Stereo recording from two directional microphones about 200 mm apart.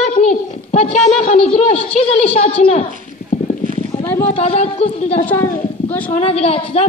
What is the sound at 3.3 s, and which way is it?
Clip-clop, 30° left (ahead or behind).